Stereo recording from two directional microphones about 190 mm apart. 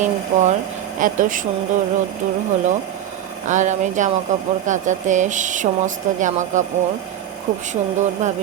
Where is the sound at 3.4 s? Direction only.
40° right (ahead or behind).